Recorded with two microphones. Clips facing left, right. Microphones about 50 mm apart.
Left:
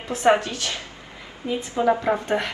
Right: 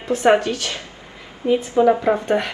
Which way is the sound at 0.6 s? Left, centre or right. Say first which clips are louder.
Right 2 dB; right.